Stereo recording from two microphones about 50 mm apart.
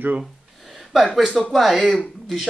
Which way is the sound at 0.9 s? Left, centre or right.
Centre.